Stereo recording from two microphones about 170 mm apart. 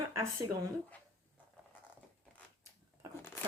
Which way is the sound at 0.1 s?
15° right (ahead or behind).